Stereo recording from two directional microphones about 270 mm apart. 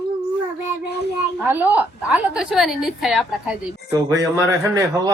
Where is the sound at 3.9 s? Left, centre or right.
Centre.